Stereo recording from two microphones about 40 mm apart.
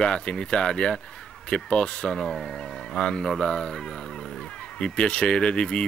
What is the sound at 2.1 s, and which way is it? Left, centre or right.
Speech, centre.